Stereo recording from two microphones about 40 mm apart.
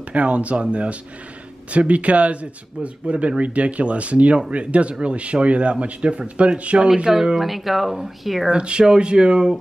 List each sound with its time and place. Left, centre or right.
0.1 s speech: right
7.3 s speech: centre
8.5 s speech: right